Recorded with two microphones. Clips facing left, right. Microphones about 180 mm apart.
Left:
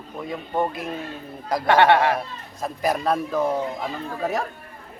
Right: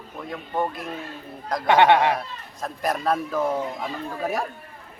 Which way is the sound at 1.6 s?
20° right (ahead or behind).